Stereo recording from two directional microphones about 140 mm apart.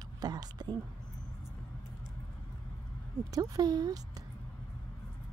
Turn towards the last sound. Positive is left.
turn(degrees=-30)  # may be behind; listen again after turning